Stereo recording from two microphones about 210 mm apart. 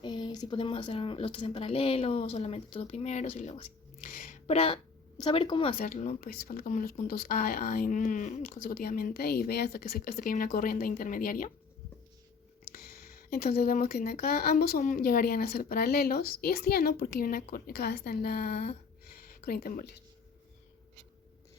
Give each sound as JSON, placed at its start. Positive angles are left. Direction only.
{"t": 0.0, "sound": "speech", "side_deg": 20}
{"t": 5.8, "sound": "speech", "side_deg": 35}
{"t": 12.7, "sound": "speech", "side_deg": 45}
{"t": 19.1, "sound": "a sound", "side_deg": 45}